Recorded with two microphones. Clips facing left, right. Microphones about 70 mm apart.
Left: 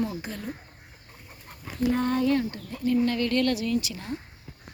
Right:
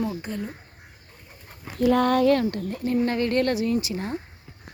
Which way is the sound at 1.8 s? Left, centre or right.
Right.